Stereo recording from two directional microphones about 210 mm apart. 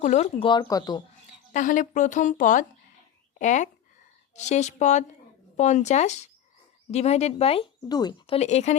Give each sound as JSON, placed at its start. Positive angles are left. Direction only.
{"t": 0.0, "sound": "speech", "side_deg": 35}
{"t": 1.5, "sound": "speech", "side_deg": 40}
{"t": 8.4, "sound": "speech", "side_deg": 30}